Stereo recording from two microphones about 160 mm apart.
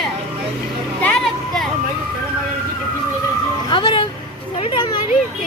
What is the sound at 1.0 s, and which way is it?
Vehicle, 5° left (ahead or behind).